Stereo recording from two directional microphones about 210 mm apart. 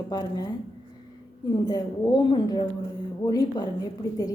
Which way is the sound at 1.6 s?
20° left (ahead or behind).